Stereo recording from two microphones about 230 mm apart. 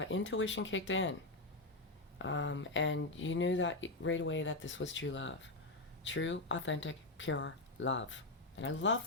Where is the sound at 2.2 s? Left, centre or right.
Left.